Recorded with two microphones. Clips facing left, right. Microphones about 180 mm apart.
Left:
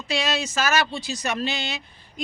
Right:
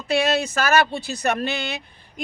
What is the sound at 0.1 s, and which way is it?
Speech, 60° right (ahead or behind).